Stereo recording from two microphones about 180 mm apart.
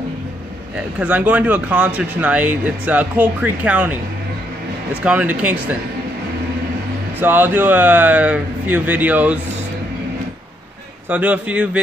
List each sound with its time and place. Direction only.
0.9 s speech: 5° right (ahead or behind)
5.0 s speech: 10° right (ahead or behind)
7.2 s speech: 10° right (ahead or behind)
11.1 s speech: 10° right (ahead or behind)